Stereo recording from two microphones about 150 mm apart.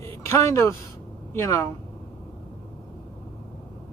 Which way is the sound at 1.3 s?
20° left (ahead or behind).